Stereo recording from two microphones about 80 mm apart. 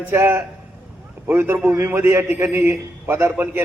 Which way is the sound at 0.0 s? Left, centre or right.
Right.